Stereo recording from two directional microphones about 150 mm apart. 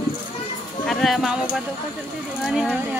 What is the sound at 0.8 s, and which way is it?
Speech, centre (ahead or behind).